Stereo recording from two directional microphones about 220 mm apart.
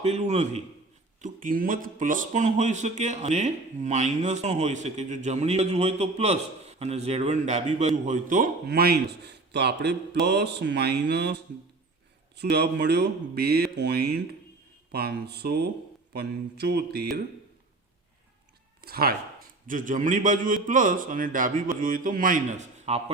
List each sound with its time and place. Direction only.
0.0 s speech: 30° right (ahead or behind); by 11.3 s 50° right (ahead or behind)
12.4 s speech: 50° right (ahead or behind)
18.8 s speech: 45° right (ahead or behind)